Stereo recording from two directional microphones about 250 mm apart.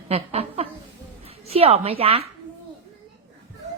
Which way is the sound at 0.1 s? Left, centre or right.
Right.